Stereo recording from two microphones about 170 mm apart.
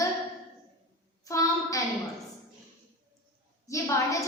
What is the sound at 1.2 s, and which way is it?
Speech, 20° left (ahead or behind).